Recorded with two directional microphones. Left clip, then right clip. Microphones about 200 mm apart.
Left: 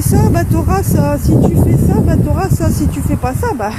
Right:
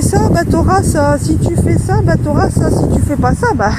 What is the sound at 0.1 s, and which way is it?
Speech, 25° right (ahead or behind).